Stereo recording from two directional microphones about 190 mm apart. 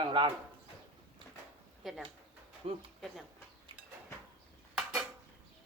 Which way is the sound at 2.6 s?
30° right (ahead or behind).